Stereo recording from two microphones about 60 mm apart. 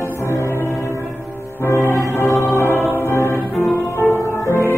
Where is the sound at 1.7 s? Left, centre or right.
Left.